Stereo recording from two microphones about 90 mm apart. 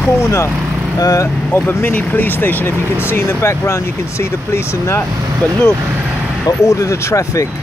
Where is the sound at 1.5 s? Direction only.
20° left (ahead or behind).